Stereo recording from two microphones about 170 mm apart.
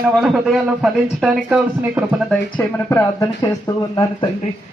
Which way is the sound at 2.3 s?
10° left (ahead or behind).